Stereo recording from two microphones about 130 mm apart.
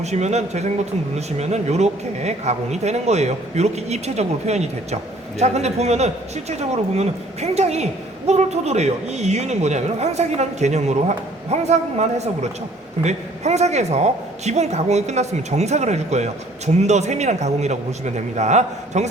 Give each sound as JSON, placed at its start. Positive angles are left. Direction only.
{"t": 0.0, "sound": "a man's voice", "side_deg": -60}